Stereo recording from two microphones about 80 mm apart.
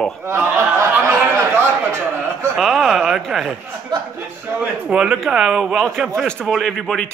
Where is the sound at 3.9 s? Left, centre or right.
Right.